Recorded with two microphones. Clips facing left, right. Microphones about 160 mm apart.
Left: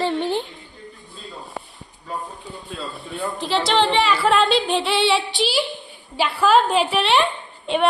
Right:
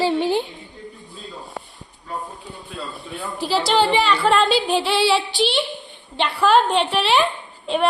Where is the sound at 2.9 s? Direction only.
Centre (ahead or behind).